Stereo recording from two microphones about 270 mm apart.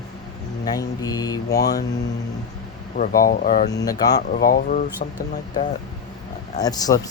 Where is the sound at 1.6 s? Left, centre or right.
Left.